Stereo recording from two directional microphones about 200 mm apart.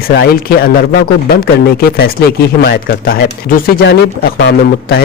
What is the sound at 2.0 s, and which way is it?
Speech, 50° left (ahead or behind).